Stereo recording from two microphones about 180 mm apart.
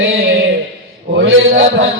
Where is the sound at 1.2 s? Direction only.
90° right.